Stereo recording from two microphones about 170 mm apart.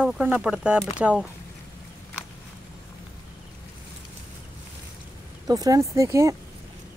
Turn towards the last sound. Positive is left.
turn(degrees=-15)  # may be behind; listen again after turning